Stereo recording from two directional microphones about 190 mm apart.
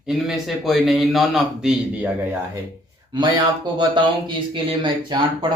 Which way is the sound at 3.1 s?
25° right (ahead or behind).